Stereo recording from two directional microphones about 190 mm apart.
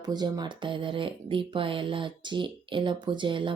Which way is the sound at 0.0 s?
20° right (ahead or behind).